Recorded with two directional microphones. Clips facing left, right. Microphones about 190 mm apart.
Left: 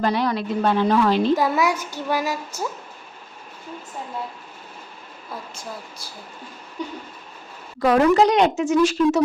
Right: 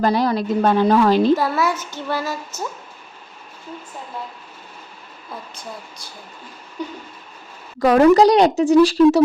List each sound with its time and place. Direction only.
0.0 s a woman's voice: 35° right (ahead or behind)
1.4 s female singing: 15° left (ahead or behind)
7.8 s a woman's voice: 40° right (ahead or behind)